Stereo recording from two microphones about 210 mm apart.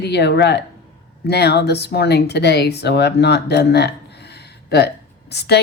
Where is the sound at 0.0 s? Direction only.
55° left (ahead or behind).